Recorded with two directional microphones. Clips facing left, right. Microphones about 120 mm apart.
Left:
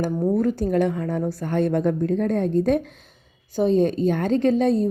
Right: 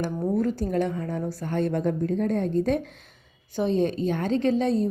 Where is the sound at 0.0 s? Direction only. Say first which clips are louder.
Left 4 dB; 55° left (ahead or behind).